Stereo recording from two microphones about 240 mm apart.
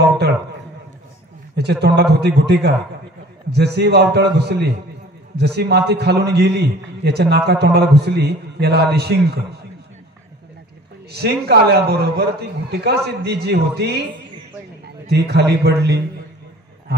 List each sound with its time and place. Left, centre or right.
1.6 s a man's voice: right
11.1 s a man's voice: right
15.0 s a man's voice: right